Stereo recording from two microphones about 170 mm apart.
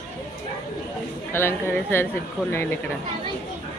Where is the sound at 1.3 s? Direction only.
15° left (ahead or behind).